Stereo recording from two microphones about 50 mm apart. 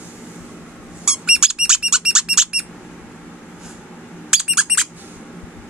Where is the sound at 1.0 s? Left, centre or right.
Centre.